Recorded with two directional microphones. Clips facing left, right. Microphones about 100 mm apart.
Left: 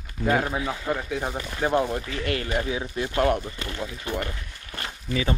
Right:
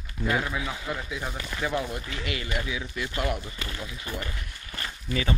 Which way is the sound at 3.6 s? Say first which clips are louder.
Left 4 dB; 30° left (ahead or behind).